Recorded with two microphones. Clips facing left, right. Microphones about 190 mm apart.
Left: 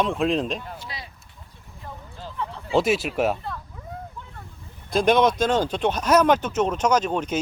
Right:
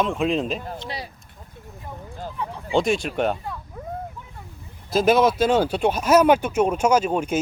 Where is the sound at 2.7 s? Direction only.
5° left (ahead or behind).